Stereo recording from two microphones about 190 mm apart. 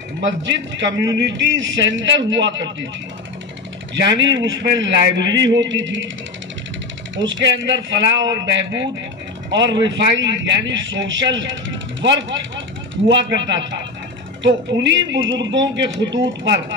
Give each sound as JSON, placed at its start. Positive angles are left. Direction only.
{"t": 0.4, "sound": "speech", "side_deg": -70}
{"t": 3.9, "sound": "speech", "side_deg": -70}
{"t": 7.2, "sound": "speech", "side_deg": -75}